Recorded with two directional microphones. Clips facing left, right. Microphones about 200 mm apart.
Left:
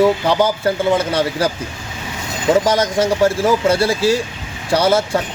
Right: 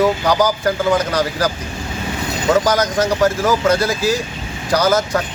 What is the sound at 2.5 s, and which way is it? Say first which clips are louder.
Speech: left 1 dB; 30° left (ahead or behind).